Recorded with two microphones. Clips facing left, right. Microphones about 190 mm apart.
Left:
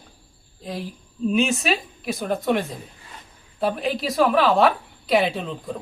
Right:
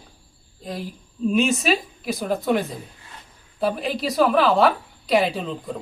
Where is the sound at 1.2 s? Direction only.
Centre (ahead or behind).